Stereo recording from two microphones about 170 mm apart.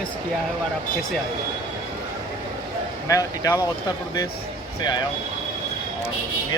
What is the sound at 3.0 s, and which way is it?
Speech, 20° left (ahead or behind).